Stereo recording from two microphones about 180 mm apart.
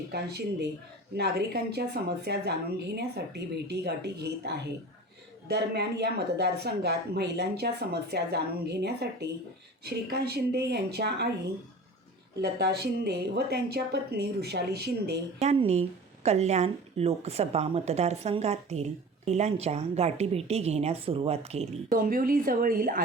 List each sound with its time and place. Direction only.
0.1 s a woman's voice: 65° right (ahead or behind)
12.4 s a woman's voice: 65° right (ahead or behind)
15.4 s a woman's voice: 35° right (ahead or behind)
21.8 s speech: 55° right (ahead or behind)